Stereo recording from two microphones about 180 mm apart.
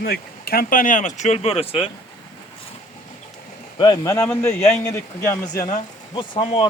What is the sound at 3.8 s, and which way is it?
A man's voice, 20° left (ahead or behind).